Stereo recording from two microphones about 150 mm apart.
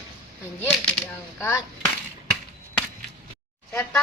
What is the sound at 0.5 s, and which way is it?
Speech, 10° left (ahead or behind).